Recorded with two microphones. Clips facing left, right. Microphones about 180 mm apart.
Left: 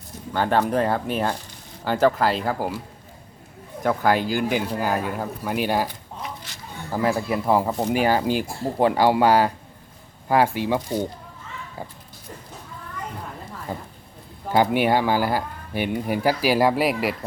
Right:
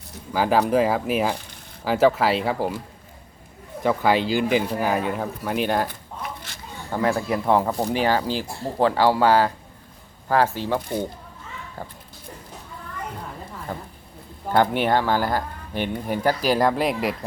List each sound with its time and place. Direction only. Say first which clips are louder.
0.3 s speech: right 2 dB; 5° right (ahead or behind)
4.2 s speech: right 2 dB; 50° left (ahead or behind)
4.5 s speech: right 2 dB; centre (ahead or behind)
5.9 s a sound: even; 50° right (ahead or behind)
6.9 s speech: even; 5° left (ahead or behind)
13.7 s speech: left 2 dB; 10° left (ahead or behind)